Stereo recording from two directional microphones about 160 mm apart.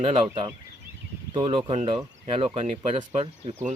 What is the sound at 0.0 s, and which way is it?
Speech, 35° right (ahead or behind).